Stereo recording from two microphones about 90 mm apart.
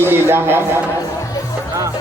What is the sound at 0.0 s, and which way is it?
Speech, 25° right (ahead or behind).